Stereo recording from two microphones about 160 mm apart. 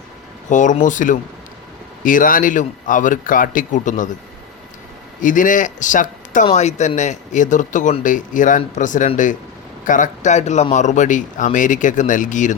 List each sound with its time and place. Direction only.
0.5 s a man's voice: 50° left (ahead or behind)
5.2 s speech: 55° left (ahead or behind)